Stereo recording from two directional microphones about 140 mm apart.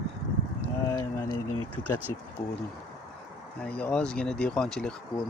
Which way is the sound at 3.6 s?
10° left (ahead or behind).